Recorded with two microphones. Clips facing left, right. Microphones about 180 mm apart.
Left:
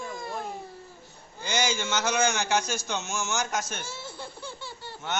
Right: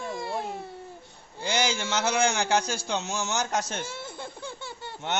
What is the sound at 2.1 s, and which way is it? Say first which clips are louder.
A man's voice: right 2 dB; 30° right (ahead or behind).